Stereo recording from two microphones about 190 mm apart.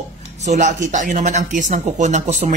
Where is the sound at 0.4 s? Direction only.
40° right (ahead or behind).